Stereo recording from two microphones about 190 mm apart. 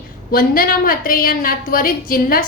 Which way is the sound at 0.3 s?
50° left (ahead or behind).